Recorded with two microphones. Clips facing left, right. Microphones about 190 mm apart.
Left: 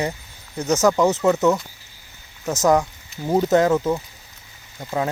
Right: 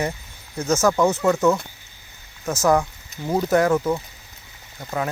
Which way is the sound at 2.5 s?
20° left (ahead or behind).